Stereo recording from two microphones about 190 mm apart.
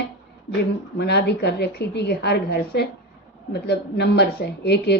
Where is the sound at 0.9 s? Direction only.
60° left (ahead or behind).